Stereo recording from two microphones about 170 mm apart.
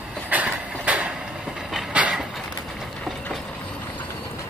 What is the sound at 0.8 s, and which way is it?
Train, 5° right (ahead or behind).